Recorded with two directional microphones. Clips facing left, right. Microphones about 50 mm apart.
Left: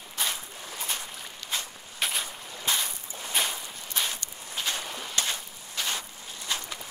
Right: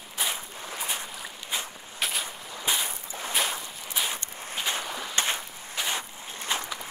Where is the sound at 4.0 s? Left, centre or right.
Centre.